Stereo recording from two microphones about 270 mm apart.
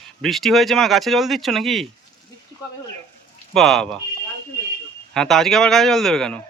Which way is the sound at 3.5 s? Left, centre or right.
Centre.